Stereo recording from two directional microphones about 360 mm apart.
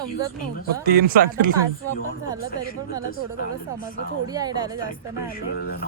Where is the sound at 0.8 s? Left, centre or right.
Right.